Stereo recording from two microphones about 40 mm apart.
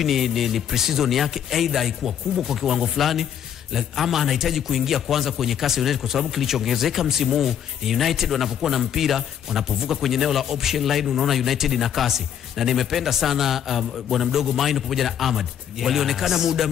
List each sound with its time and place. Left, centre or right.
0.0 s a man's voice: centre